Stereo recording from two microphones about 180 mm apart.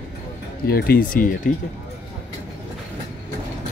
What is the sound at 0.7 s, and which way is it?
Speech, 55° left (ahead or behind).